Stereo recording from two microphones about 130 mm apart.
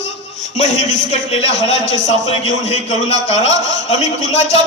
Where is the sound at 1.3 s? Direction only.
50° left (ahead or behind).